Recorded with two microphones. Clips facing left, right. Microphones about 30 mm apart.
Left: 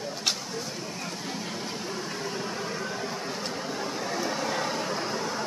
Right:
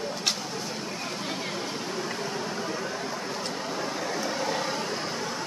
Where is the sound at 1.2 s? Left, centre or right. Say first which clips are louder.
Right 2 dB; right.